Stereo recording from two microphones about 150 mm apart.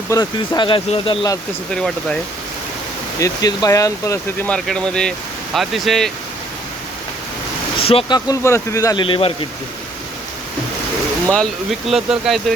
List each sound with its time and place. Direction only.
0.1 s speech: 25° left (ahead or behind)
1.7 s speech: 5° left (ahead or behind)
3.2 s speech: 25° left (ahead or behind)
4.4 s speech: 5° left (ahead or behind)
7.8 s speech: 40° left (ahead or behind)
8.3 s speech: 20° left (ahead or behind)
9.0 s speech: 35° left (ahead or behind)
11.3 s speech: centre (ahead or behind)